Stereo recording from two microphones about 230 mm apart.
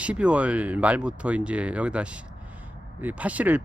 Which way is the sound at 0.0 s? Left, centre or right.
Centre.